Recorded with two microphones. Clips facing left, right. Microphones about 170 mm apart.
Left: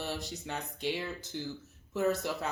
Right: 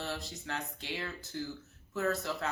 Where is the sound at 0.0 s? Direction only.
20° left (ahead or behind).